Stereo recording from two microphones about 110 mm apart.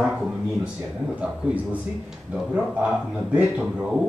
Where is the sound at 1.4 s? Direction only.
10° right (ahead or behind).